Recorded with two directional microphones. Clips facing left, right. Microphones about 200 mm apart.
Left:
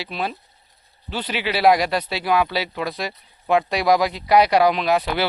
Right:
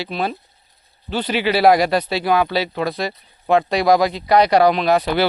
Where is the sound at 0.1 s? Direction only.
45° right (ahead or behind).